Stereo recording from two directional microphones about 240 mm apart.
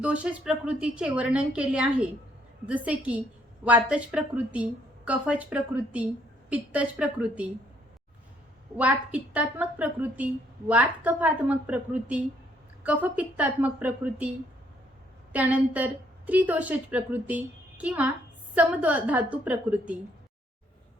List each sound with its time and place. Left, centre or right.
0.0 s a woman's voice: centre
8.8 s a woman's voice: centre
15.3 s a woman's voice: centre